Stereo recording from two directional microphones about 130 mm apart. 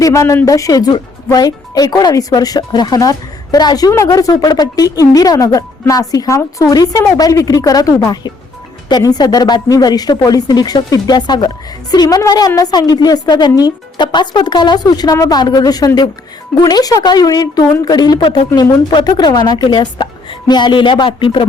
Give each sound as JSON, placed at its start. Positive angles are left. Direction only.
{"t": 0.0, "sound": "speech", "side_deg": 25}